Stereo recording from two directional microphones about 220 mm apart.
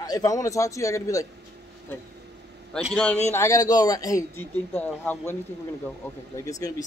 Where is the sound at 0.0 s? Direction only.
15° left (ahead or behind).